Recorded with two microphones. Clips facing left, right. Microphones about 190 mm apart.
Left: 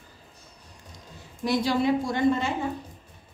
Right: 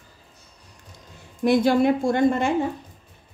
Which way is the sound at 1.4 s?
55° right (ahead or behind).